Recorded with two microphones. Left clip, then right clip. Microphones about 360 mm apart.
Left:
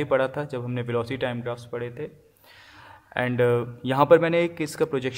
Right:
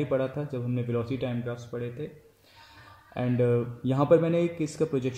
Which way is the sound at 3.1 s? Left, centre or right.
Left.